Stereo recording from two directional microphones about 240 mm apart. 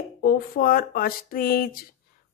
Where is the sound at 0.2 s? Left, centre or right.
Left.